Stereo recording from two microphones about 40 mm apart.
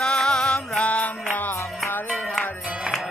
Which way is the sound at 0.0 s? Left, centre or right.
Centre.